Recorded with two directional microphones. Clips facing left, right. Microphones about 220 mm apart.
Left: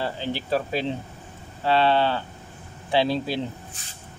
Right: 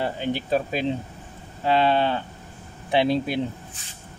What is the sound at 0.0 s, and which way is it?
Speech, 15° right (ahead or behind).